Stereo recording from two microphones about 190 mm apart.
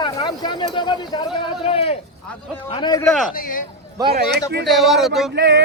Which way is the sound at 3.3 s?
45° left (ahead or behind).